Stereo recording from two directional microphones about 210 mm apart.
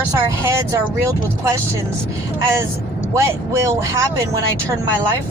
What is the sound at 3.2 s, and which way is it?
Speech, 15° right (ahead or behind).